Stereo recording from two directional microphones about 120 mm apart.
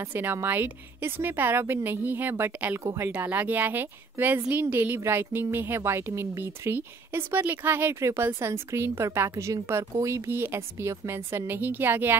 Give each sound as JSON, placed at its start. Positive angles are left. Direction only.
{"t": 0.1, "sound": "a woman's voice", "side_deg": -15}